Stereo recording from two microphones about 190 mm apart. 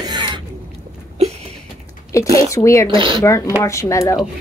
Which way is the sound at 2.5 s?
15° left (ahead or behind).